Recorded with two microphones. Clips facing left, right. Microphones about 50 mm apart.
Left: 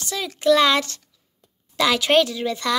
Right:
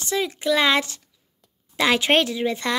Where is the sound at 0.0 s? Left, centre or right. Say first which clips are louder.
Right 4 dB; right.